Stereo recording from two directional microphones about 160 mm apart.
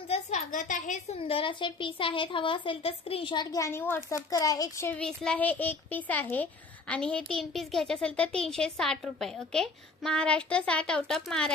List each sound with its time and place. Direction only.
0.1 s a woman's voice: 50° left (ahead or behind)
1.3 s speech: 30° left (ahead or behind)
3.5 s a woman's voice: 15° left (ahead or behind)
4.9 s a child's voice: 5° left (ahead or behind)